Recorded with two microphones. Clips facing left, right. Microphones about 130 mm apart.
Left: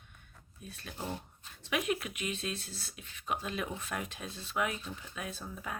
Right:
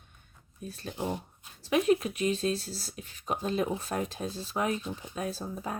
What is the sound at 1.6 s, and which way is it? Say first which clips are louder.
Speech: right 9 dB; 35° right (ahead or behind).